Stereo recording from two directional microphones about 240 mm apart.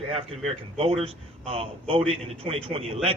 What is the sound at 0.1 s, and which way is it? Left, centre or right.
A man's voice, right.